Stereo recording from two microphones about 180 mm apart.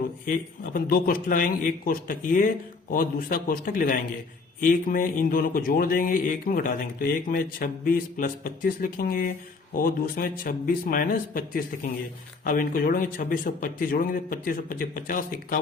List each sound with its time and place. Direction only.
0.3 s a man's voice: 50° left (ahead or behind)